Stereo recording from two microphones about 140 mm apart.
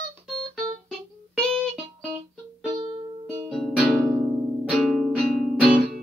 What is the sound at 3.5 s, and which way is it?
Music, 5° left (ahead or behind).